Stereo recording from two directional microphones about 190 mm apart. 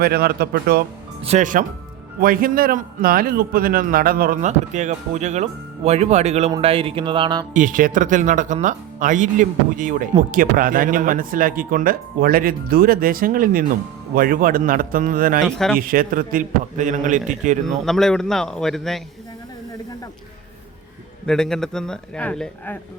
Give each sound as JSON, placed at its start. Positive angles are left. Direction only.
{"t": 0.0, "sound": "a man's voice", "side_deg": -55}
{"t": 1.2, "sound": "a man's voice", "side_deg": -35}
{"t": 7.5, "sound": "speech", "side_deg": -45}
{"t": 15.4, "sound": "a man's voice", "side_deg": 0}
{"t": 15.9, "sound": "a man's voice", "side_deg": -45}
{"t": 17.8, "sound": "a man's voice", "side_deg": 0}
{"t": 21.2, "sound": "a man's voice", "side_deg": 5}